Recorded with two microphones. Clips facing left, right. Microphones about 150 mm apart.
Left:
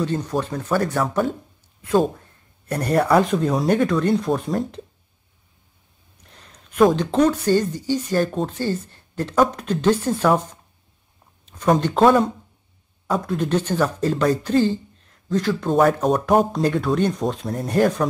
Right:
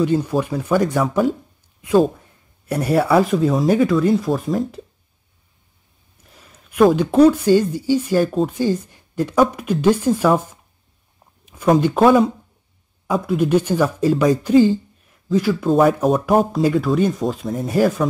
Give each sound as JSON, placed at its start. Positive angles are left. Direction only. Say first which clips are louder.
{"t": 0.0, "sound": "speech", "louder": "right 5 dB", "side_deg": -10}
{"t": 2.6, "sound": "speech", "louder": "right 2 dB", "side_deg": -10}
{"t": 6.2, "sound": "a sound", "louder": "right 1 dB", "side_deg": -5}
{"t": 7.2, "sound": "speech", "louder": "right 5 dB", "side_deg": -10}